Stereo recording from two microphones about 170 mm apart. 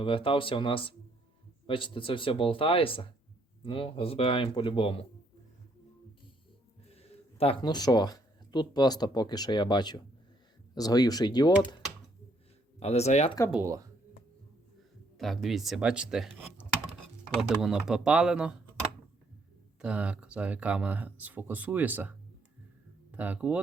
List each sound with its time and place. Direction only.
0.0 s speech: 30° left (ahead or behind)
6.9 s speech: 35° left (ahead or behind)
12.8 s speech: 40° left (ahead or behind)
13.5 s speech: 15° right (ahead or behind)
15.2 s speech: centre (ahead or behind)
19.8 s speech: 5° right (ahead or behind)
23.1 s speech: 10° right (ahead or behind)